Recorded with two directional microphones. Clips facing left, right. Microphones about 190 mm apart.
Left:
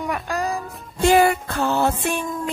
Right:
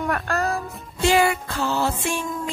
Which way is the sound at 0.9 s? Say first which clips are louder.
Left 3 dB; 50° left (ahead or behind).